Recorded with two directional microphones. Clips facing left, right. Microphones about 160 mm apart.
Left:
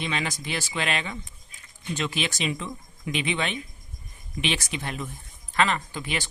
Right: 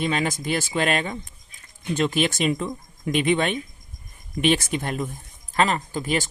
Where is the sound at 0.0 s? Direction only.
45° right (ahead or behind).